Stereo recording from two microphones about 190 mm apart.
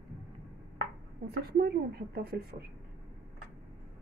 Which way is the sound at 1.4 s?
55° right (ahead or behind).